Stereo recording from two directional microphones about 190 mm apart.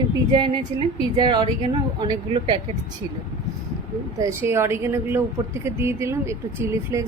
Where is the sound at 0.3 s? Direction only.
25° right (ahead or behind).